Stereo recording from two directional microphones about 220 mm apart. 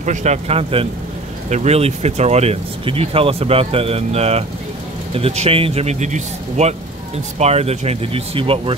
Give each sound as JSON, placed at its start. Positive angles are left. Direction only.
{"t": 0.0, "sound": "speech", "side_deg": -30}